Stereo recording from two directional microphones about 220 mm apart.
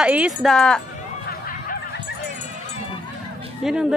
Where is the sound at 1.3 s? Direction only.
45° left (ahead or behind).